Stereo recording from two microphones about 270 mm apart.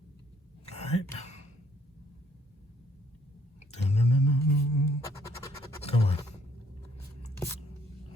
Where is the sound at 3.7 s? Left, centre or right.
Left.